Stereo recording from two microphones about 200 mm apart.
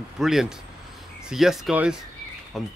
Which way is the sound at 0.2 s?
Centre (ahead or behind).